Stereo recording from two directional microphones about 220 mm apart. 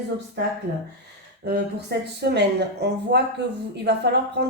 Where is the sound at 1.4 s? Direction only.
50° right (ahead or behind).